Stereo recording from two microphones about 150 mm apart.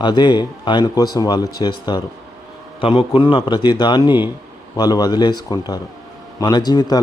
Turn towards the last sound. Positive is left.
turn(degrees=25)  # may be behind; listen again after turning